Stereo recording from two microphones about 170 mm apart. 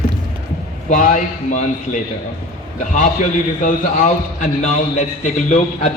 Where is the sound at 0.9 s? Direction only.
45° left (ahead or behind).